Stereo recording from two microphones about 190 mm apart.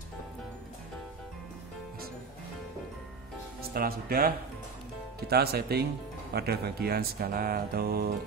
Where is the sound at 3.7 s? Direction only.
50° right (ahead or behind).